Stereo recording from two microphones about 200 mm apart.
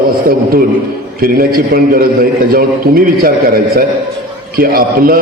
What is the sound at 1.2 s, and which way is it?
A man's voice, 45° right (ahead or behind).